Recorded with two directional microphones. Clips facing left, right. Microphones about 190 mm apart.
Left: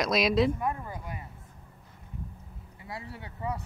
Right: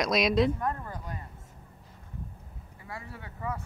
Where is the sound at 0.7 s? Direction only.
10° left (ahead or behind).